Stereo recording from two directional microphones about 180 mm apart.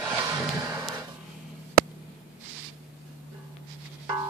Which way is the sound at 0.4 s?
20° right (ahead or behind).